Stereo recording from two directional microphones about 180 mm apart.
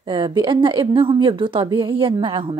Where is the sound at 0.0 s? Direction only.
25° right (ahead or behind).